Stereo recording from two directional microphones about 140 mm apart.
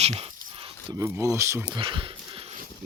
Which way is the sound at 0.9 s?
25° right (ahead or behind).